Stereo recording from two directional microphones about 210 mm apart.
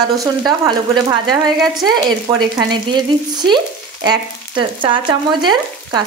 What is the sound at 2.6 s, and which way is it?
Frying, 20° right (ahead or behind).